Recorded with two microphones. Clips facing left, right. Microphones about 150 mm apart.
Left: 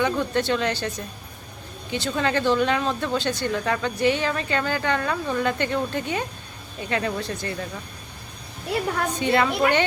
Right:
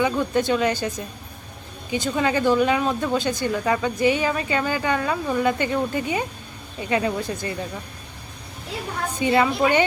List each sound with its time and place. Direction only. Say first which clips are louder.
0.0 s speech: right 2 dB; 10° right (ahead or behind)
9.1 s speech: right 3 dB; 10° right (ahead or behind)